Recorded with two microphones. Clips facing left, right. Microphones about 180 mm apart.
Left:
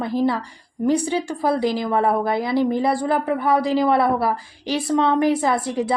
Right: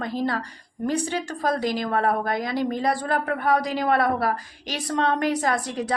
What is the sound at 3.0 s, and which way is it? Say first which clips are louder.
Speech: left 4 dB; 10° left (ahead or behind).